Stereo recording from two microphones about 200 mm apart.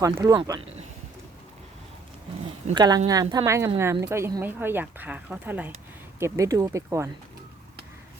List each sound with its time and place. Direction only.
0.0 s speech: 15° right (ahead or behind)
2.7 s speech: 20° right (ahead or behind)